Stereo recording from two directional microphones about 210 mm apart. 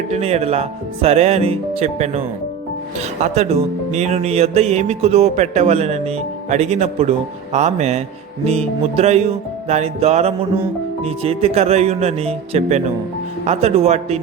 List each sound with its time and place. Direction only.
0.1 s speech: 30° right (ahead or behind)